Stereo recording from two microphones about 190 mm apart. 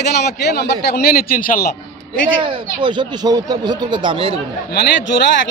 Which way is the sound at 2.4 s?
25° right (ahead or behind).